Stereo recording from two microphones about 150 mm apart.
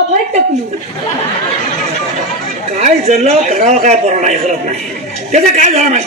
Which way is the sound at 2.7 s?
50° right (ahead or behind).